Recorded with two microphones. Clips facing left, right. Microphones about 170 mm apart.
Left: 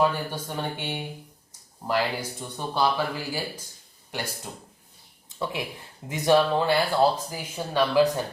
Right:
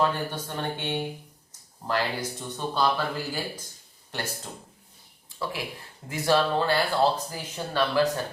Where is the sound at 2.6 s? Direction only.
10° left (ahead or behind).